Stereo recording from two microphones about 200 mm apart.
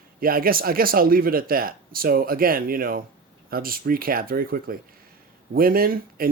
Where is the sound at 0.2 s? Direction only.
45° right (ahead or behind).